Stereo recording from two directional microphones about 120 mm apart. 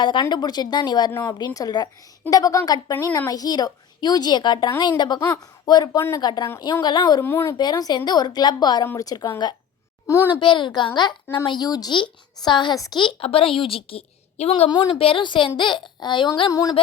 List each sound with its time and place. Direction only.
0.0 s a woman's voice: 40° left (ahead or behind)
6.0 s a child's voice: 20° left (ahead or behind)
6.2 s a woman's voice: 35° left (ahead or behind)
7.3 s a child's voice: 20° left (ahead or behind)
7.6 s a woman's voice: 35° left (ahead or behind)
10.1 s a child's voice: 20° left (ahead or behind)
10.4 s a woman's voice: 40° left (ahead or behind)